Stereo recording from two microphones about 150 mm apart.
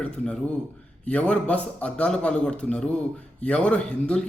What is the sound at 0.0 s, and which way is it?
A man's voice, 10° left (ahead or behind).